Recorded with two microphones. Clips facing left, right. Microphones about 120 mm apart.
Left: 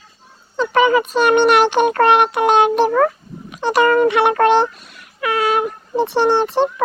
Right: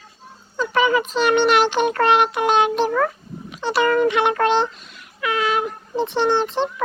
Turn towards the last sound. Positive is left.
turn(degrees=50)  # may be behind; listen again after turning